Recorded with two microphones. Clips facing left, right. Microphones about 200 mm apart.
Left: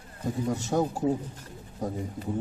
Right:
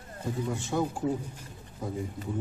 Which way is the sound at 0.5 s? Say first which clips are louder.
Left 4 dB; 40° left (ahead or behind).